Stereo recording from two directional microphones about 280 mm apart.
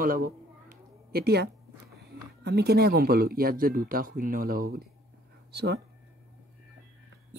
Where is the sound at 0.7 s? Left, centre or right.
Right.